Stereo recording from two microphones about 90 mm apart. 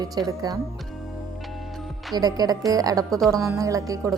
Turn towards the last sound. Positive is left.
turn(degrees=-35)  # may be behind; listen again after turning